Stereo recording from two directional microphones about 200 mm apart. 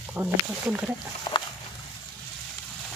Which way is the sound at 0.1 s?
5° right (ahead or behind).